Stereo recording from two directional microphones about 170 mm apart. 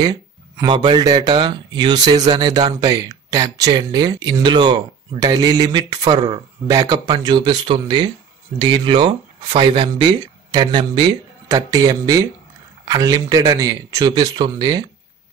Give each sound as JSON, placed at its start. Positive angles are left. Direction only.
{"t": 0.0, "sound": "speech", "side_deg": -25}